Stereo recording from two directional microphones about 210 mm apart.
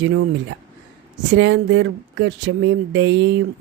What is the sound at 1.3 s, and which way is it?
Speech, 60° right (ahead or behind).